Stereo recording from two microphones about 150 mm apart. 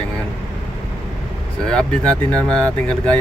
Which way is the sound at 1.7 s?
5° left (ahead or behind).